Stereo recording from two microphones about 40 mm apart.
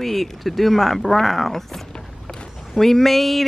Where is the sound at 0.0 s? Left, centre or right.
Centre.